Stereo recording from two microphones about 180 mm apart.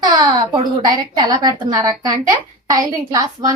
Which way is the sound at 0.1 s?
25° right (ahead or behind).